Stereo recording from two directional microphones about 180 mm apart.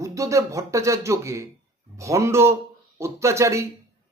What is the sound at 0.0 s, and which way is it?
A man's voice, 15° right (ahead or behind).